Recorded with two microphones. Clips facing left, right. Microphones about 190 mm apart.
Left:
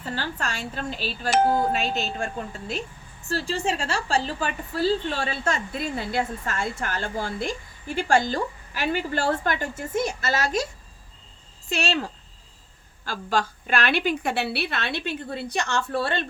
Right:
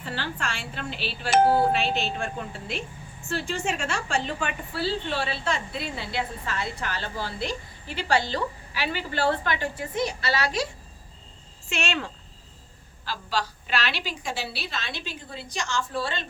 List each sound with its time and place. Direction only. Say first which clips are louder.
0.0 s a woman's voice: left 2 dB; 40° left (ahead or behind)
11.7 s speech: left 3 dB; 35° left (ahead or behind)
13.1 s a woman's voice: left 4 dB; 50° left (ahead or behind)